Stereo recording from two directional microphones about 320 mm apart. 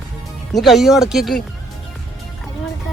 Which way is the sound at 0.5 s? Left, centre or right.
Centre.